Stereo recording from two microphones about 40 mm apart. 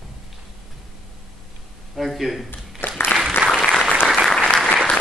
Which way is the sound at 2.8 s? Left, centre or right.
Left.